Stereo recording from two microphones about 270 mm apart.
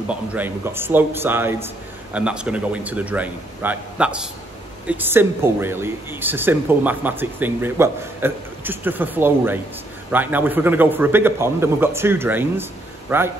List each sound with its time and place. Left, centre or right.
0.1 s a man's voice: centre